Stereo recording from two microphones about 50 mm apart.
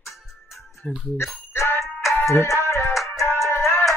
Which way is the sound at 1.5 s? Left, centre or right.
Left.